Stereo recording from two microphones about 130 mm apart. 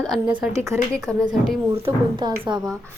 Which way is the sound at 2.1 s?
35° right (ahead or behind).